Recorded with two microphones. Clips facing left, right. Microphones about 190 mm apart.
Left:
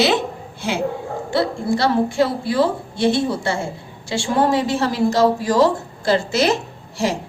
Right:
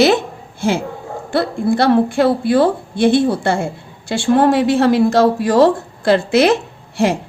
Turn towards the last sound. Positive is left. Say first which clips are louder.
# right 5 dB
turn(degrees=-60)  # may be behind; listen again after turning